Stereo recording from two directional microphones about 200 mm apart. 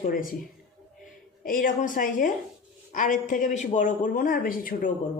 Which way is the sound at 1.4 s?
45° left (ahead or behind).